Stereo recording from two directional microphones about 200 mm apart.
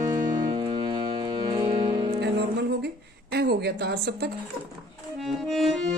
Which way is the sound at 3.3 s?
55° right (ahead or behind).